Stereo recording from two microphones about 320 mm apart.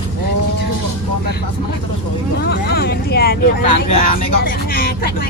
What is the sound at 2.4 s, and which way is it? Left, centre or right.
Speech, left.